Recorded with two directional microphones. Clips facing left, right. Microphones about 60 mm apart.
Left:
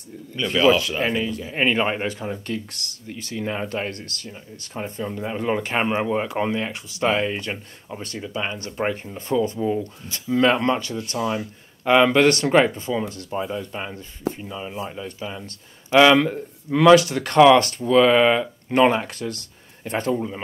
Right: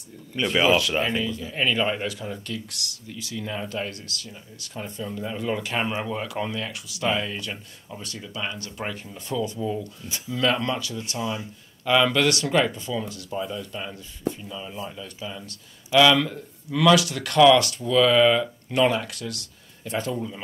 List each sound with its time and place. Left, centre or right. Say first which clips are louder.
0.4 s speech: left 3 dB; centre
1.0 s speech: left 3 dB; left